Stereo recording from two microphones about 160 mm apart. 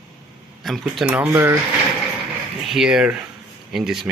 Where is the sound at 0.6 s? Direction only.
Centre (ahead or behind).